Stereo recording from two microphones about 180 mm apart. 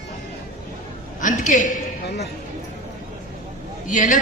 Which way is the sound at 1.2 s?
45° left (ahead or behind).